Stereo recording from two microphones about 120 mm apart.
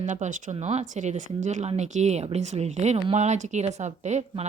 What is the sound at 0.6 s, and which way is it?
Speech, 70° right (ahead or behind).